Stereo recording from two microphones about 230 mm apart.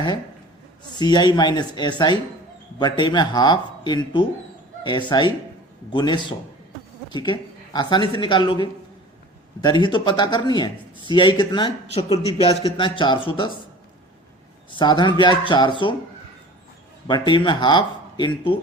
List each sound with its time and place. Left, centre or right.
0.9 s a man's voice: centre
14.7 s a man's voice: centre
17.1 s a man's voice: centre